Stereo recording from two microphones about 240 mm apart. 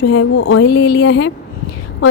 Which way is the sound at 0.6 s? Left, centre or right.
Left.